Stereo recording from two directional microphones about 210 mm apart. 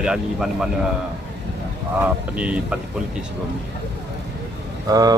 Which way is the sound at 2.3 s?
5° right (ahead or behind).